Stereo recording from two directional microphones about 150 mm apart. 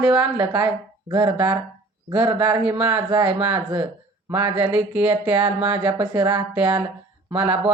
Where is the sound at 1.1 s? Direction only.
25° right (ahead or behind).